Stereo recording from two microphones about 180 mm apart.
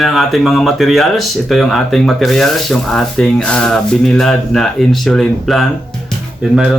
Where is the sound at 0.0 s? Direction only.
Centre (ahead or behind).